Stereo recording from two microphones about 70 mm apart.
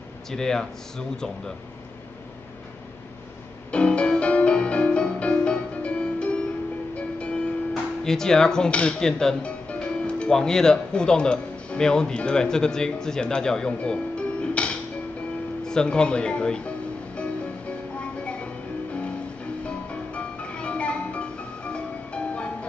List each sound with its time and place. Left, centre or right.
0.3 s speech: centre
3.7 s music: centre
8.0 s speech: centre
15.6 s music: centre
19.6 s music: centre